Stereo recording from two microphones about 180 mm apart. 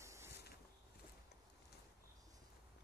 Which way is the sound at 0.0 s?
15° right (ahead or behind).